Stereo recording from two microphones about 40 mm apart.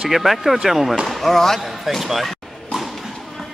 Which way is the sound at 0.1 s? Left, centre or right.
Centre.